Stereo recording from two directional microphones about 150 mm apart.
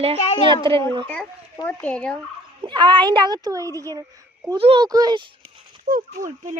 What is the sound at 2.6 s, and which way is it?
A child's voice, 30° right (ahead or behind).